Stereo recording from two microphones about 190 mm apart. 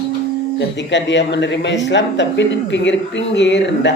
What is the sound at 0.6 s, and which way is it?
Speech, 70° left (ahead or behind).